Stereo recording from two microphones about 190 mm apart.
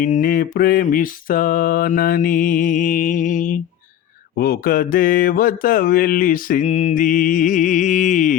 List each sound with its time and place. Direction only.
0.0 s mantra: 45° left (ahead or behind)
4.4 s mantra: 55° left (ahead or behind)